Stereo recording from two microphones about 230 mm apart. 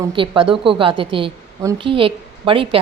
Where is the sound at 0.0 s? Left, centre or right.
Right.